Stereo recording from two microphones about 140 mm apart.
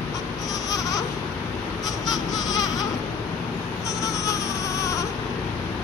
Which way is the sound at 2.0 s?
25° left (ahead or behind).